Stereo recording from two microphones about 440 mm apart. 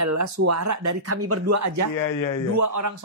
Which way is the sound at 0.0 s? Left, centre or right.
Right.